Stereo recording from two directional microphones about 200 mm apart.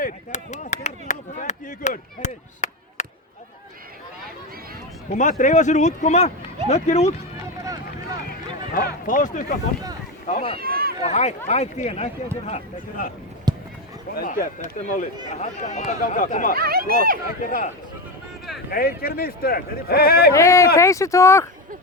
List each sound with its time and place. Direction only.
0.0 s chop: 35° left (ahead or behind)
5.1 s speech: 40° left (ahead or behind)
8.3 s run: 45° left (ahead or behind)
10.6 s a sound: 50° right (ahead or behind)
11.0 s speech: 35° left (ahead or behind)
13.5 s run: 20° right (ahead or behind)
14.2 s speech: 45° left (ahead or behind)
16.6 s speech: 50° right (ahead or behind)
17.4 s speech: 40° left (ahead or behind)
18.7 s speech: 45° left (ahead or behind)
20.3 s speech: 15° left (ahead or behind)